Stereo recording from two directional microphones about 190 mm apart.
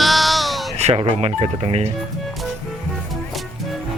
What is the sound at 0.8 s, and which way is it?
Speech, 35° right (ahead or behind).